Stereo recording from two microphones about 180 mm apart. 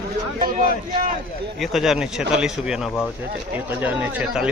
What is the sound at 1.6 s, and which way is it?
Speech, centre (ahead or behind).